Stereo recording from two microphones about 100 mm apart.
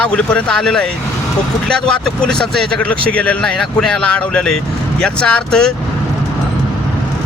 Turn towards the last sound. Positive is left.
turn(degrees=10)  # may be behind; listen again after turning